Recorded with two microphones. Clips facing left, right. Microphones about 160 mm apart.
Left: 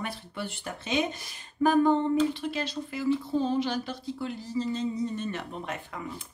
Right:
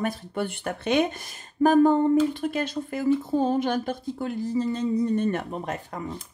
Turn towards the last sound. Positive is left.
turn(degrees=-40)  # may be behind; listen again after turning